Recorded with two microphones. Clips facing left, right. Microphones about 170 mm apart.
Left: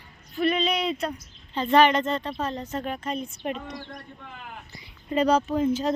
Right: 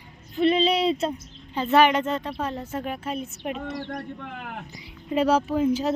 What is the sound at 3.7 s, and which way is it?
Speech, 70° right (ahead or behind).